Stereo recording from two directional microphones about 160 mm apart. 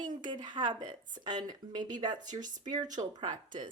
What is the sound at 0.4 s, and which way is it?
Speech, 30° right (ahead or behind).